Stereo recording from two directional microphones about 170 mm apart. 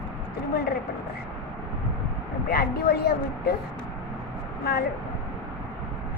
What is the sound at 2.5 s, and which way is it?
Speech, 65° left (ahead or behind).